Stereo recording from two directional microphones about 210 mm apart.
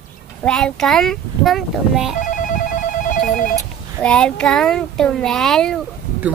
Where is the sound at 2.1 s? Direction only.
40° left (ahead or behind).